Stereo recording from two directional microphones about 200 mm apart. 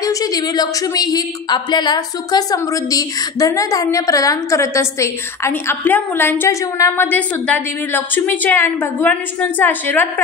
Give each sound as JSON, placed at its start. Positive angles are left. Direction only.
{"t": 0.0, "sound": "a woman's voice", "side_deg": 15}